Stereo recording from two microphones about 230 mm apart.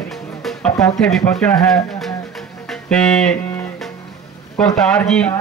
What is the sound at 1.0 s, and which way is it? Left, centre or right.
Speech, centre.